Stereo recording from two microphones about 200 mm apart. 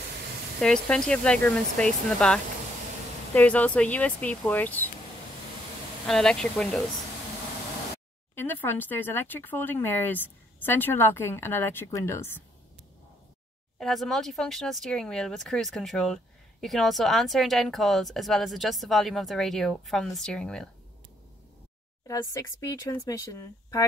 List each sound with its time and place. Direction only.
0.6 s speech: 5° left (ahead or behind)
6.0 s speech: 5° left (ahead or behind)
8.4 s speech: 10° left (ahead or behind)
13.7 s speech: centre (ahead or behind)
22.0 s speech: 15° left (ahead or behind)